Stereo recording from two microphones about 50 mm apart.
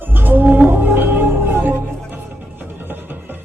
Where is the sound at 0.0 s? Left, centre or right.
Right.